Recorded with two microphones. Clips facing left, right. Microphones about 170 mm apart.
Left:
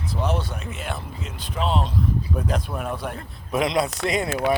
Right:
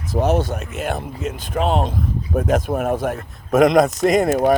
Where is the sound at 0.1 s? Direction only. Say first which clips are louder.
Right 8 dB; 45° right (ahead or behind).